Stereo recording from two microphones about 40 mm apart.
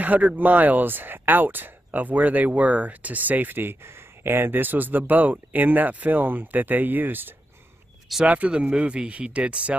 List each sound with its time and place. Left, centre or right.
0.0 s speech: right
1.9 s speech: right
8.3 s speech: right